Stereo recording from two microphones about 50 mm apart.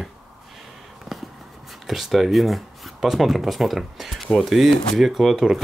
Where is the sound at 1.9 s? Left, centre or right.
Centre.